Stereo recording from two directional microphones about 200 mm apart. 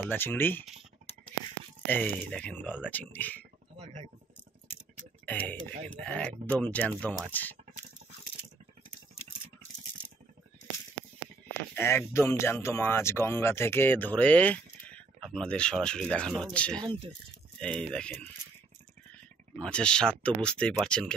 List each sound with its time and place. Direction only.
0.1 s speech: 10° left (ahead or behind)
1.9 s speech: 10° left (ahead or behind)
3.7 s speech: 30° right (ahead or behind)
5.2 s speech: 10° left (ahead or behind)
11.7 s speech: 10° left (ahead or behind)
16.8 s speech: 25° right (ahead or behind)
17.6 s speech: 5° left (ahead or behind)
19.6 s speech: 5° left (ahead or behind)